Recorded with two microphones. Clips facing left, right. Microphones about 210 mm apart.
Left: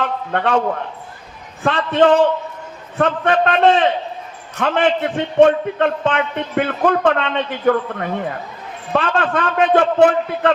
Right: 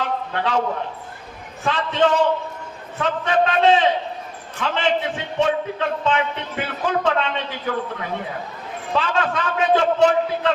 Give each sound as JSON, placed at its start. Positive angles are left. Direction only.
{"t": 0.3, "sound": "a man's voice", "side_deg": 55}
{"t": 1.6, "sound": "a man's voice", "side_deg": 55}